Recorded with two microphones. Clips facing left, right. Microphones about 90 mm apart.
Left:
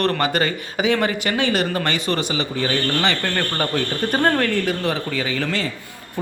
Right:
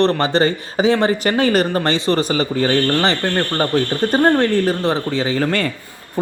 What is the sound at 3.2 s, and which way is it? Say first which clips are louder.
A man's voice: right 4 dB; 25° right (ahead or behind).